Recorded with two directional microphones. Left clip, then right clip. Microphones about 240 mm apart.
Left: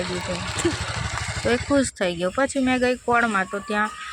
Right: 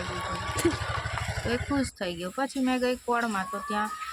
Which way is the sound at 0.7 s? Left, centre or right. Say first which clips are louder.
Left 3 dB; left.